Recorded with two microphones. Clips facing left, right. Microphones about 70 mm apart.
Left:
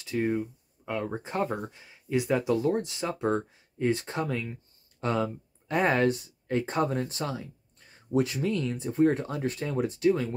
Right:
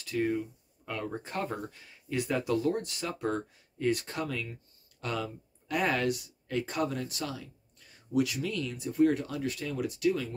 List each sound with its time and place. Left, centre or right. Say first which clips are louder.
0.0 s speech: left 2 dB; left